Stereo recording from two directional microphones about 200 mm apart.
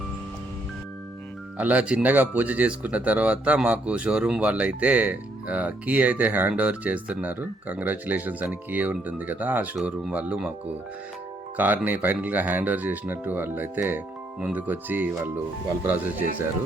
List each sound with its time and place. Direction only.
1.5 s speech: 5° right (ahead or behind)
11.5 s speech: 10° right (ahead or behind)
16.2 s speech: 40° left (ahead or behind)